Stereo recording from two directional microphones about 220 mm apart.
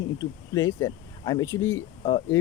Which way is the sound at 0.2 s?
15° left (ahead or behind).